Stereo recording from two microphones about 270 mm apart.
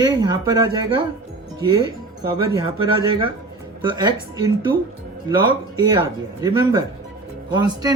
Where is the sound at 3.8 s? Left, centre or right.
Centre.